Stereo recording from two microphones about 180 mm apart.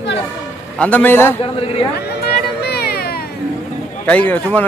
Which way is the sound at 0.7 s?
10° left (ahead or behind).